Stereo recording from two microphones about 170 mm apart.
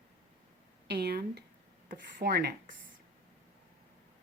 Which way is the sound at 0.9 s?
75° right (ahead or behind).